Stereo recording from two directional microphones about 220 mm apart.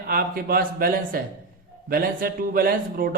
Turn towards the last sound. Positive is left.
turn(degrees=-45)  # may be behind; listen again after turning